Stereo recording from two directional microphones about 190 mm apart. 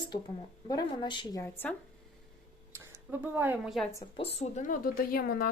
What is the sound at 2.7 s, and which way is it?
Speech, 10° right (ahead or behind).